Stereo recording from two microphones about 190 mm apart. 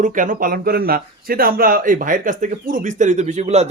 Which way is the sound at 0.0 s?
45° right (ahead or behind).